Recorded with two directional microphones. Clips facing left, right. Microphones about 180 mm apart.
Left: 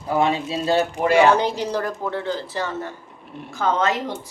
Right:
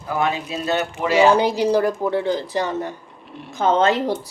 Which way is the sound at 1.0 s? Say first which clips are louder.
Right 1 dB; 55° left (ahead or behind).